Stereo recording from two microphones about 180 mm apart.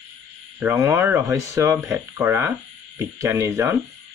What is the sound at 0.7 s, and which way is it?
Speech, 20° right (ahead or behind).